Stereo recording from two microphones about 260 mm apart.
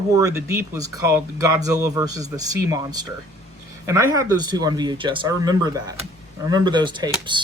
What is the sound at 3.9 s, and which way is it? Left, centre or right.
Speech, centre.